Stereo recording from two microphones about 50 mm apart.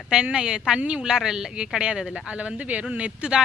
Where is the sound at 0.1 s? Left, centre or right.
Centre.